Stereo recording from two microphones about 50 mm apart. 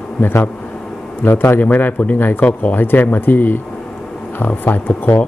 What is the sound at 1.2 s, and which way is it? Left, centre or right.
Speech, left.